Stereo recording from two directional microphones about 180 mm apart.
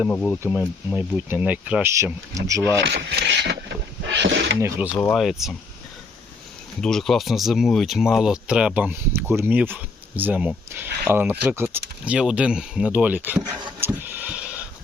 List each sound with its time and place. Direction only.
0.1 s speech: 5° left (ahead or behind)
0.9 s speech: 10° right (ahead or behind)
2.8 s speech: 70° right (ahead or behind)
4.9 s speech: 5° left (ahead or behind)
6.8 s speech: centre (ahead or behind)
13.8 s a sound: 10° right (ahead or behind)